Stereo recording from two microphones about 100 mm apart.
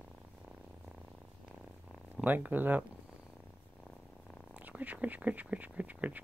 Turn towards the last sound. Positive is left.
turn(degrees=-15)  # may be behind; listen again after turning